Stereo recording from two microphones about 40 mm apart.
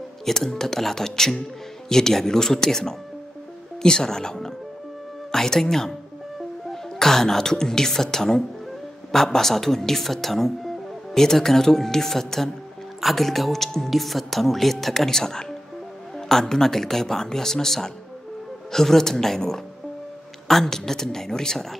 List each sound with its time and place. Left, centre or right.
0.2 s a woman's voice: centre